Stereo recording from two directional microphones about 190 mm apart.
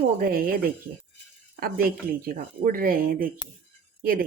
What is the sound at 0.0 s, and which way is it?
A woman's voice, 50° right (ahead or behind).